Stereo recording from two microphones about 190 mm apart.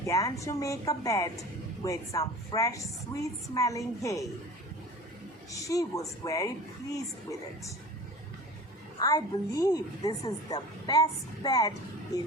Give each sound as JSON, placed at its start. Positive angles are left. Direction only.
{"t": 0.0, "sound": "a woman's voice", "side_deg": 15}
{"t": 5.5, "sound": "a woman's voice", "side_deg": 15}
{"t": 9.0, "sound": "a woman's voice", "side_deg": 20}